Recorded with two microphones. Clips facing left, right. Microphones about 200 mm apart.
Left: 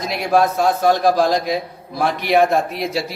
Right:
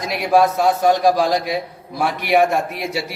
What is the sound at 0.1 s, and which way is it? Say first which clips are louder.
A man's voice: right 1 dB; 10° right (ahead or behind).